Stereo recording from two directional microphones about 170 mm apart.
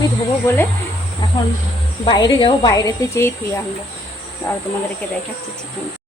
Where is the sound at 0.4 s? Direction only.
10° left (ahead or behind).